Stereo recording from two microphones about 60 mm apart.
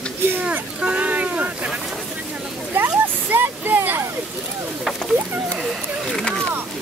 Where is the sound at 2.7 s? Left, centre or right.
Right.